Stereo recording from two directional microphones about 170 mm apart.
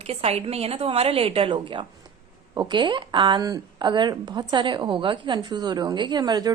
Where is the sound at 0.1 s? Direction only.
35° right (ahead or behind).